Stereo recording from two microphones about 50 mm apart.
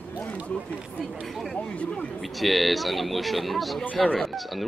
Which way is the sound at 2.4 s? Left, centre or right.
Centre.